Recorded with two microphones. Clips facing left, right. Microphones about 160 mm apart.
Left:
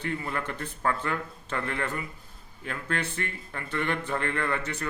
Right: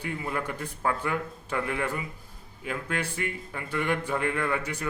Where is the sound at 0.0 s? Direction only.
10° right (ahead or behind).